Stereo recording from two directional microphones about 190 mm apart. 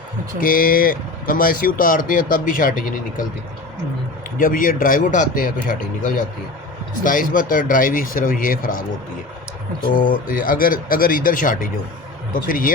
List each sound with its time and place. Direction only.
0.3 s speech: 50° left (ahead or behind)
4.4 s speech: 45° left (ahead or behind)
9.9 s speech: 45° left (ahead or behind)